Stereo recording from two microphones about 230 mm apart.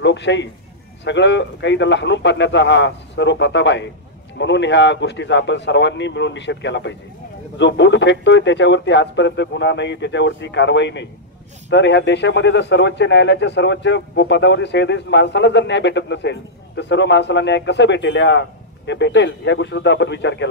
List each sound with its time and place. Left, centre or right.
0.0 s speech: left